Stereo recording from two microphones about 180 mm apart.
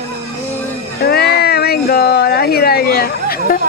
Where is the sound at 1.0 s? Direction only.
60° left (ahead or behind).